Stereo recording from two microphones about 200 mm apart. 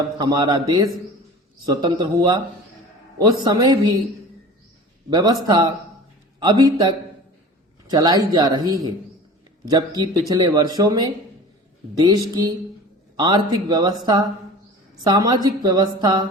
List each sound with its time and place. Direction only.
0.2 s speech: 20° right (ahead or behind)
5.1 s speech: 20° right (ahead or behind)